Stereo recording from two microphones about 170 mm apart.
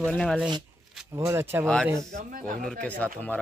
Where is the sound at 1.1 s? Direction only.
15° right (ahead or behind).